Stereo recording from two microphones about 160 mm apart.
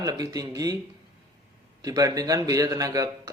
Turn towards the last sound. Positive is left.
turn(degrees=-20)  # may be behind; listen again after turning